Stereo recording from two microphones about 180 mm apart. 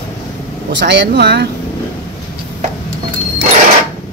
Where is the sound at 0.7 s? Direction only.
75° right (ahead or behind).